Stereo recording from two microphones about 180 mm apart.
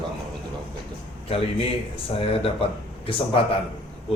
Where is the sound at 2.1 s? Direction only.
30° left (ahead or behind).